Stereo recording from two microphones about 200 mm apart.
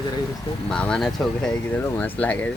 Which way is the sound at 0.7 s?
5° left (ahead or behind).